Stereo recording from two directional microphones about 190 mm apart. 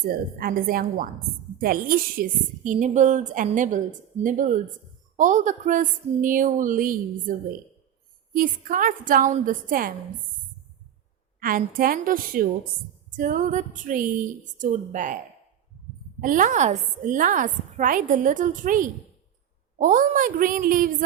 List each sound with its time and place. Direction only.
0.3 s a woman's voice: 50° right (ahead or behind)
11.3 s a woman's voice: 45° right (ahead or behind)
16.2 s a woman's voice: 45° right (ahead or behind)